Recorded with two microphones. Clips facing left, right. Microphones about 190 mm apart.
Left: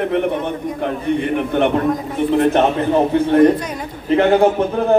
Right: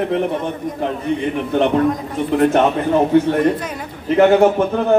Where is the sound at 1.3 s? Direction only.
55° left (ahead or behind).